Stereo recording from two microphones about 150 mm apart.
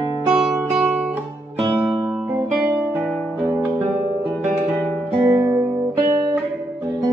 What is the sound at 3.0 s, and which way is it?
Music, centre (ahead or behind).